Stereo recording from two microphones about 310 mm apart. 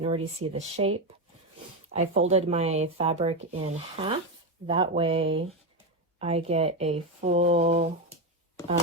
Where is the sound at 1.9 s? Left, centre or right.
Right.